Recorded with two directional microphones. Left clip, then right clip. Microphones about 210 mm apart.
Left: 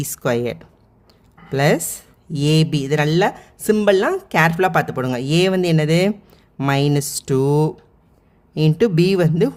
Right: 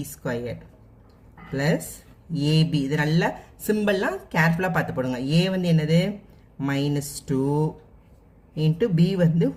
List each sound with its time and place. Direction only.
0.2 s speech: 50° left (ahead or behind)